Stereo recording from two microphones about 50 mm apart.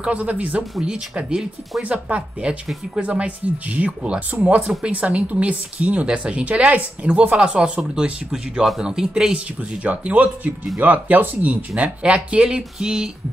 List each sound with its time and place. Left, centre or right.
0.0 s speech: right
0.8 s speech: centre
1.8 s speech: right
7.3 s speech: centre
9.8 s speech: right; by 13.1 s centre